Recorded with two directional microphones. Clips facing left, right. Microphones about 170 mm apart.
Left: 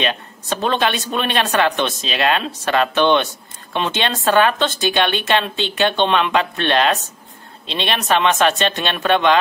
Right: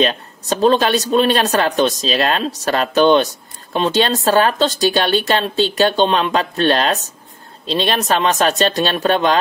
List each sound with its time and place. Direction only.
0.0 s speech: 35° right (ahead or behind)